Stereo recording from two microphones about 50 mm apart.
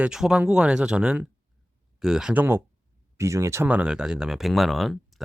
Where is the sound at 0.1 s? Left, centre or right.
Centre.